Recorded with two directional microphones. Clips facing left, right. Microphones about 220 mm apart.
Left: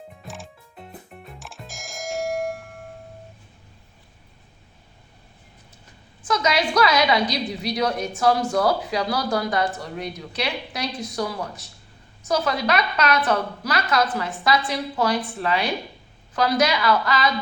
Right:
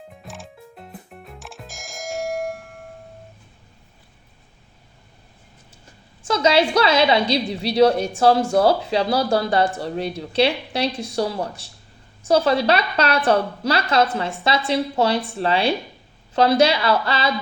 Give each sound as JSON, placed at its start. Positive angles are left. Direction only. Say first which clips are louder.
{"t": 0.2, "sound": "music", "louder": "right 1 dB", "side_deg": 0}
{"t": 6.2, "sound": "a woman's voice", "louder": "right 5 dB", "side_deg": -30}